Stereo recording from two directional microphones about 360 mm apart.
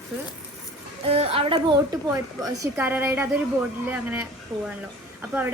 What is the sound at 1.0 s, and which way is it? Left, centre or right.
Speech, centre.